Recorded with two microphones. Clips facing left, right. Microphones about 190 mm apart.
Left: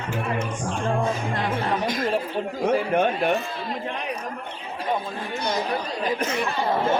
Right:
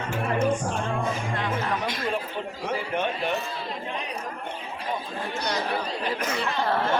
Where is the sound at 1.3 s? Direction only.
35° left (ahead or behind).